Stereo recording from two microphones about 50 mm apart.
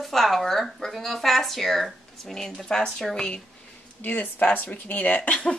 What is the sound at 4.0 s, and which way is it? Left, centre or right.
Speech, left.